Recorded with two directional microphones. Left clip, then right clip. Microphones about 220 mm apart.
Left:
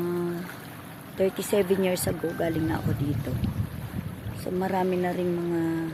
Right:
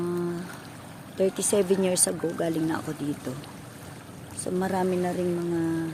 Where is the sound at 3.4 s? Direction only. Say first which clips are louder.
Left 7 dB; 35° right (ahead or behind).